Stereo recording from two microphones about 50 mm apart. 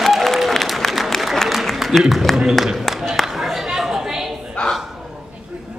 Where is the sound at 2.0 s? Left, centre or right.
Centre.